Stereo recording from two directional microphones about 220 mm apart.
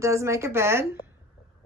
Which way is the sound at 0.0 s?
15° right (ahead or behind).